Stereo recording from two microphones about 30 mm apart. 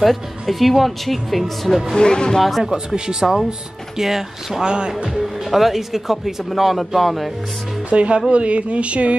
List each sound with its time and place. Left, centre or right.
0.0 s speech: centre
2.0 s speech: left
2.7 s speech: centre
4.6 s speech: right
5.1 s speech: centre
7.9 s speech: right